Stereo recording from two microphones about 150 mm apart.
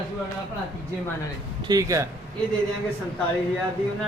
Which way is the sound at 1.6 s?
25° right (ahead or behind).